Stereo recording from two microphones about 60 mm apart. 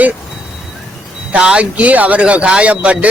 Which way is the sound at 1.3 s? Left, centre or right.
Centre.